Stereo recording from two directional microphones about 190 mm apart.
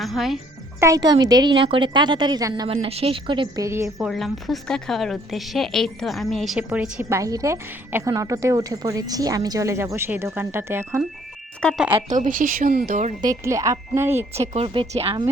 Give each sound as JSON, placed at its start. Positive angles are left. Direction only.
{"t": 0.0, "sound": "speech", "side_deg": 0}
{"t": 0.8, "sound": "a woman's voice", "side_deg": -20}
{"t": 4.0, "sound": "a woman's voice", "side_deg": 0}
{"t": 11.6, "sound": "speech", "side_deg": 0}
{"t": 11.9, "sound": "speech", "side_deg": -40}
{"t": 13.2, "sound": "a woman's voice", "side_deg": -15}
{"t": 14.3, "sound": "a woman's voice", "side_deg": -35}